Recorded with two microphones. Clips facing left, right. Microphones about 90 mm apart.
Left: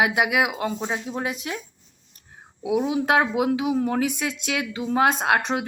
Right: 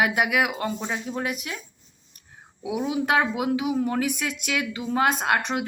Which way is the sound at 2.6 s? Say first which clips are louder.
Left 3 dB; 25° left (ahead or behind).